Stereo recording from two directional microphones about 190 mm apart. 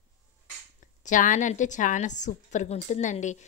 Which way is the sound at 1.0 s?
40° left (ahead or behind).